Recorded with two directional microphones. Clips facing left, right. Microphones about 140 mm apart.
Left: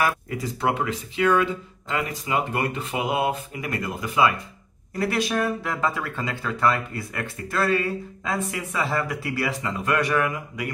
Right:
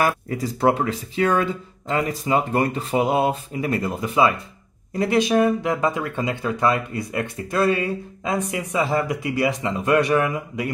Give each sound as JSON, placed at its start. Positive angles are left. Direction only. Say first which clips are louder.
{"t": 0.0, "sound": "speech", "louder": "right 3 dB", "side_deg": -40}